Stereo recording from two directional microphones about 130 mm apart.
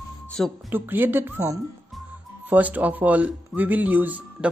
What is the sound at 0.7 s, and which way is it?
Speech, 15° right (ahead or behind).